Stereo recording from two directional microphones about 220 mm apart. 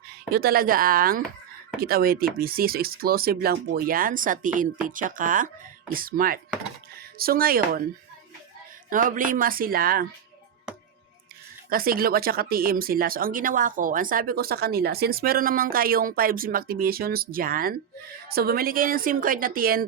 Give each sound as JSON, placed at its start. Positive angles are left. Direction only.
{"t": 0.3, "sound": "speech", "side_deg": -45}
{"t": 8.9, "sound": "speech", "side_deg": -40}
{"t": 11.7, "sound": "speech", "side_deg": -40}